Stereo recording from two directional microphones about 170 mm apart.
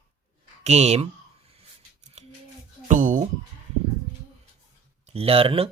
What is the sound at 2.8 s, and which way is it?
Music, 50° right (ahead or behind).